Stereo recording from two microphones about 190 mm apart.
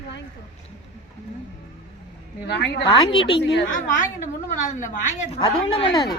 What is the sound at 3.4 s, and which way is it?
Speech, 65° left (ahead or behind).